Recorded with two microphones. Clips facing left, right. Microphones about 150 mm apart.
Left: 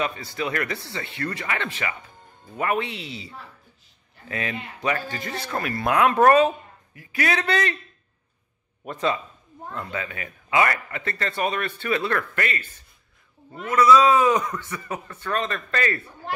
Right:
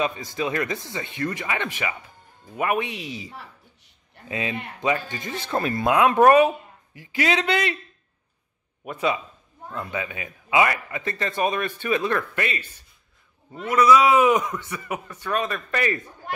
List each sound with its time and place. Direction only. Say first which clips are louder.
0.0 s a man's voice: right 2 dB; 20° right (ahead or behind)
4.3 s speech: right 1 dB; 20° right (ahead or behind)
8.8 s a man's voice: even; 10° right (ahead or behind)
13.7 s a man's voice: even; 15° right (ahead or behind)